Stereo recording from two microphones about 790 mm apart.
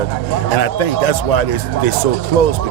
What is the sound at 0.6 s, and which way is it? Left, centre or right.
Speech, left.